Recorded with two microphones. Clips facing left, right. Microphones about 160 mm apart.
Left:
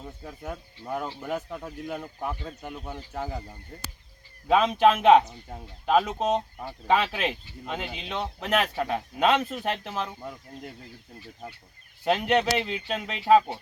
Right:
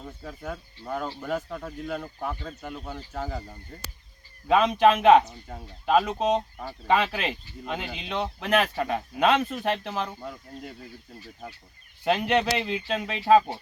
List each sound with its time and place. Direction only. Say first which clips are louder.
0.2 s speech: right 1 dB; 15° left (ahead or behind)
4.4 s speech: right 1 dB; centre (ahead or behind)
12.0 s speech: even; 5° left (ahead or behind)